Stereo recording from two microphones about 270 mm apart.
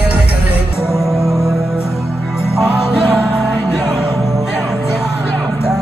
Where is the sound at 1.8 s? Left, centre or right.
Centre.